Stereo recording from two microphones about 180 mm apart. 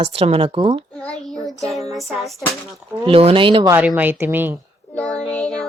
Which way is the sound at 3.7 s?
10° right (ahead or behind).